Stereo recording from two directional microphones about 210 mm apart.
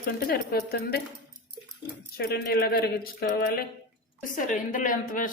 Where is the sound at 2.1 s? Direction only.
50° left (ahead or behind).